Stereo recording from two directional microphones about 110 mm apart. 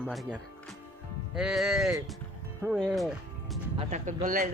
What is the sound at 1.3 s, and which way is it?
Speech, 5° right (ahead or behind).